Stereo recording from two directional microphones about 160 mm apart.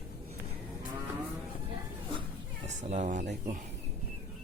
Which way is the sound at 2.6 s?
45° right (ahead or behind).